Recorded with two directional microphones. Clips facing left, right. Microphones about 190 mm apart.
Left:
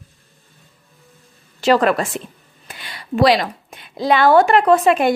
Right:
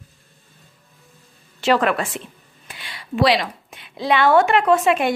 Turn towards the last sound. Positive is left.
turn(degrees=40)  # may be behind; listen again after turning